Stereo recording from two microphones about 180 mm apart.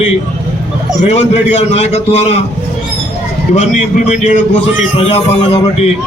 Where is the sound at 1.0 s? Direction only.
40° left (ahead or behind).